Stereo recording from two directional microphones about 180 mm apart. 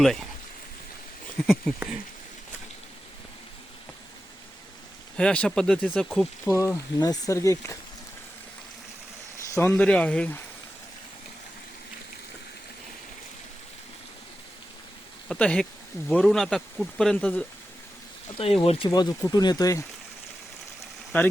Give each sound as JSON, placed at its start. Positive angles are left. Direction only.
{"t": 0.0, "sound": "speech", "side_deg": 0}
{"t": 1.5, "sound": "speech", "side_deg": 0}
{"t": 5.1, "sound": "speech", "side_deg": 5}
{"t": 6.5, "sound": "speech", "side_deg": 15}
{"t": 9.6, "sound": "speech", "side_deg": 5}
{"t": 15.3, "sound": "speech", "side_deg": 5}
{"t": 18.6, "sound": "speech", "side_deg": 35}
{"t": 18.9, "sound": "speech", "side_deg": 20}
{"t": 21.1, "sound": "speech", "side_deg": 10}